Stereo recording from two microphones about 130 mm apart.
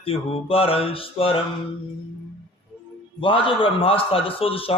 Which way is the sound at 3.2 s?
40° left (ahead or behind).